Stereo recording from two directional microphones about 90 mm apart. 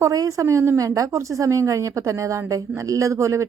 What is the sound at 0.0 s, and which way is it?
A woman's voice, 40° right (ahead or behind).